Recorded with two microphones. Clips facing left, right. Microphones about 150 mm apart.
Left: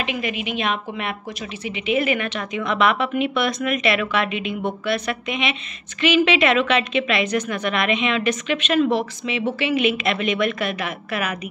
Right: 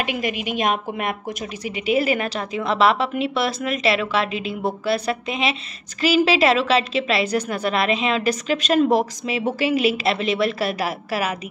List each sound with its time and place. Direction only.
0.2 s a woman's voice: 45° right (ahead or behind)